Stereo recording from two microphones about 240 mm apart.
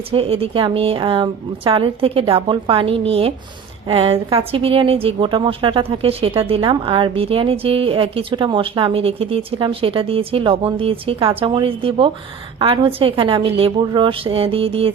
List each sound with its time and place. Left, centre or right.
0.1 s a woman's voice: right